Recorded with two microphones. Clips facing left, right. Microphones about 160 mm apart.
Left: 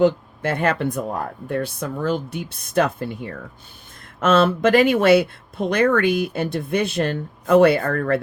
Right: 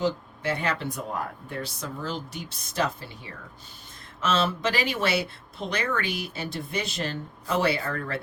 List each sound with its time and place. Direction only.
0.0 s speech: 55° left (ahead or behind)